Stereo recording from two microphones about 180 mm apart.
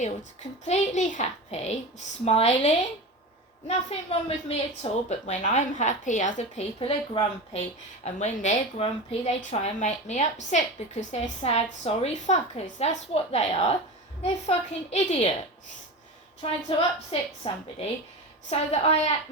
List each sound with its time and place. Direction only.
0.6 s a woman's voice: 40° left (ahead or behind)
8.0 s a woman's voice: 40° left (ahead or behind)
16.4 s a woman's voice: 35° left (ahead or behind)